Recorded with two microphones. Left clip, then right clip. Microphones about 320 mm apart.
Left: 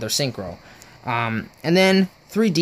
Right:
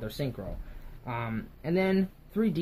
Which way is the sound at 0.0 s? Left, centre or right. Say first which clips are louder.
Left 12 dB; left.